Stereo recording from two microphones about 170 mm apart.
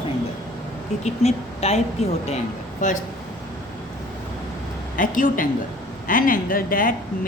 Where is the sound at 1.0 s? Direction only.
40° left (ahead or behind).